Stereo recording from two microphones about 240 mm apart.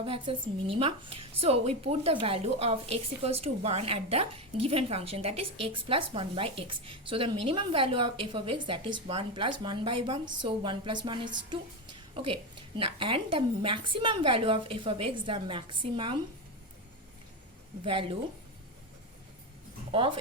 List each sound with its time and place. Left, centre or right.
0.0 s a woman's voice: right
17.8 s a woman's voice: right
19.9 s speech: right